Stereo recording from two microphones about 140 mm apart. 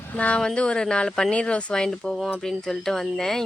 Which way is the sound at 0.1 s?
10° left (ahead or behind).